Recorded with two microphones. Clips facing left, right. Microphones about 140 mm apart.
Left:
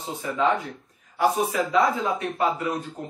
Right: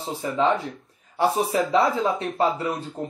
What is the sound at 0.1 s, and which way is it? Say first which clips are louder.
A man's voice: right 1 dB; 30° right (ahead or behind).